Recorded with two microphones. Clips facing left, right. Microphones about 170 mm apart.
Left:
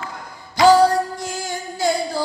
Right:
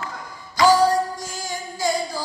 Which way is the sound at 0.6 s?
65° left (ahead or behind).